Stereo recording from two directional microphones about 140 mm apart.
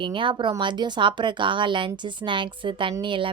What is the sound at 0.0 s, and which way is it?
Speech, 35° right (ahead or behind).